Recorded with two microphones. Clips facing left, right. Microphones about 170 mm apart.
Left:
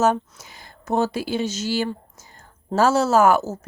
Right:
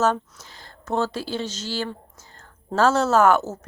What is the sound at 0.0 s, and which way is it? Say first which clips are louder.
A woman's voice: left 2 dB; 10° left (ahead or behind).